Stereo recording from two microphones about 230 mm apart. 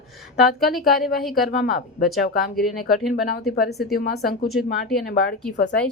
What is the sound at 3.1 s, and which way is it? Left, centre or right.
Speech, left.